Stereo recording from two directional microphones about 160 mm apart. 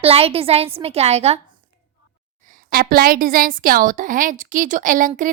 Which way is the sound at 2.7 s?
70° right (ahead or behind).